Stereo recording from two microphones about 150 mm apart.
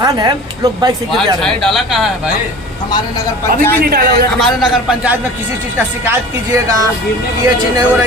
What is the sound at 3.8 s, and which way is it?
Speech, 90° right.